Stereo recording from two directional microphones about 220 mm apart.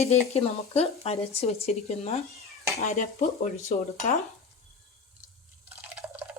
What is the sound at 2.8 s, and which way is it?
Dishes, 35° left (ahead or behind).